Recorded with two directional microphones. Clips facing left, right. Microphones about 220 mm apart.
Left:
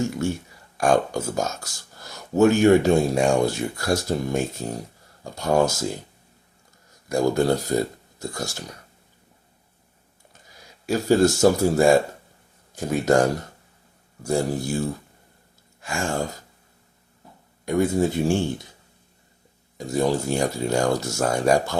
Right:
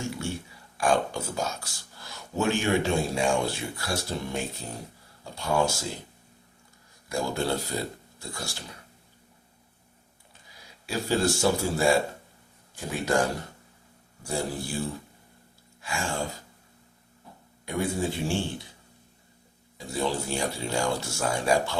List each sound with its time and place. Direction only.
0.0 s speech: 45° left (ahead or behind)
7.1 s speech: 45° left (ahead or behind)
10.4 s speech: 45° left (ahead or behind)
15.8 s gasp: 45° left (ahead or behind)
17.7 s speech: 45° left (ahead or behind)
19.7 s speech: 45° left (ahead or behind)